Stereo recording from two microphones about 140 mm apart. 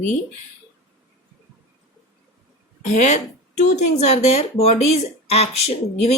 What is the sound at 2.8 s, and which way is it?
Speech, 55° left (ahead or behind).